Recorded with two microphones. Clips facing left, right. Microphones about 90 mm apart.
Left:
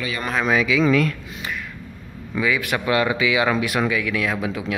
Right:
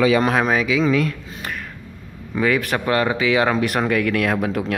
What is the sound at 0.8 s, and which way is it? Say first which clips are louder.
Speech: even; 20° right (ahead or behind).